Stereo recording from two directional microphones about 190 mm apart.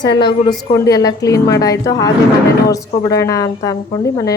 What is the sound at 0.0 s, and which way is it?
A woman's voice, 25° left (ahead or behind).